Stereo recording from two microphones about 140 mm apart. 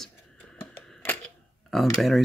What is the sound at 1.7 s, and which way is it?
Speech, centre (ahead or behind).